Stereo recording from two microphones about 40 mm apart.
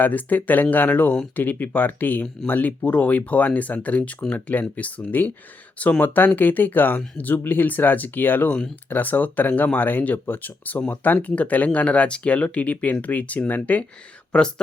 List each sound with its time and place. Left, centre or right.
0.0 s speech: left
14.3 s speech: left